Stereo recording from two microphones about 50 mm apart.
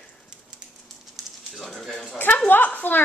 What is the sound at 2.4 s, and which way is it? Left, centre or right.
Speech, left.